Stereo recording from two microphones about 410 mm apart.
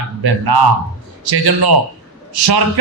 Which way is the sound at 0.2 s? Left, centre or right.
Right.